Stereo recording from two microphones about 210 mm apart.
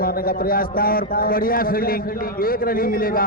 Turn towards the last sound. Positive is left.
turn(degrees=45)  # may be behind; listen again after turning